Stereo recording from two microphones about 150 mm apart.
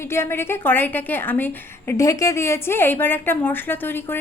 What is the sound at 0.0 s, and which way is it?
A woman's voice, 15° left (ahead or behind).